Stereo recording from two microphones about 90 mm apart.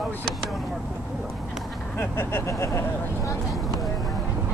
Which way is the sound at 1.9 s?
25° left (ahead or behind).